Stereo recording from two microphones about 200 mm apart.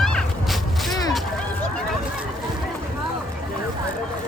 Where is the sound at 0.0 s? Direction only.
5° left (ahead or behind).